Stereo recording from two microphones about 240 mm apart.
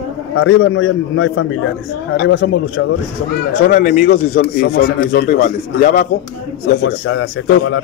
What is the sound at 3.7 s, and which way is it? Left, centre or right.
Speech, left.